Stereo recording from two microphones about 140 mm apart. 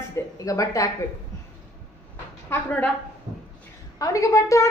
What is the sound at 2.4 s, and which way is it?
Speech, 15° left (ahead or behind).